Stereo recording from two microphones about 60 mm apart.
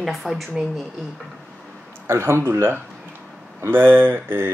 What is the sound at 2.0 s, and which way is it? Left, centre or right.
Speech, right.